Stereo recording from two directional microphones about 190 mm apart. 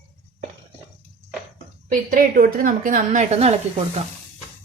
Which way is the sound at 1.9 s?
50° right (ahead or behind).